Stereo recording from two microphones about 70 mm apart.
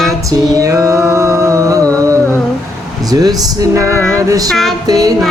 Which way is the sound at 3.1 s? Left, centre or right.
Right.